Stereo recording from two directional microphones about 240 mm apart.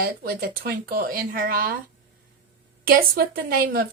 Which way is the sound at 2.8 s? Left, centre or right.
Right.